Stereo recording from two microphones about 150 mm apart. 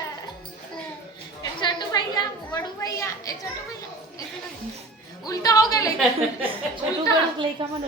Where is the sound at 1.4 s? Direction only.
30° left (ahead or behind).